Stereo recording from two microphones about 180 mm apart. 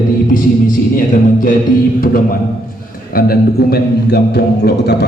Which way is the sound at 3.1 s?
55° left (ahead or behind).